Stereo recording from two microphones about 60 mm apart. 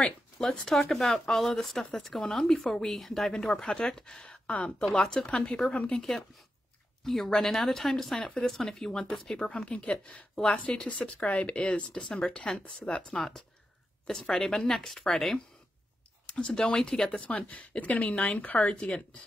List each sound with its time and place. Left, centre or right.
0.0 s speech: centre
4.5 s speech: left
5.9 s speech: centre